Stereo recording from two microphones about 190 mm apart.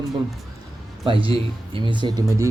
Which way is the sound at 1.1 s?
25° right (ahead or behind).